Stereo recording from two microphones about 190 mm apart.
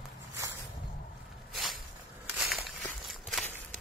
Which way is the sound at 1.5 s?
Centre (ahead or behind).